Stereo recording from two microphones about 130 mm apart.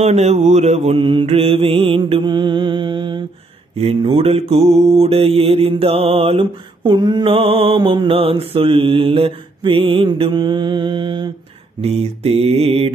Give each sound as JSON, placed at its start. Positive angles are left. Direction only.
{"t": 0.0, "sound": "mantra", "side_deg": -60}
{"t": 7.2, "sound": "mantra", "side_deg": -50}
{"t": 11.8, "sound": "mantra", "side_deg": -50}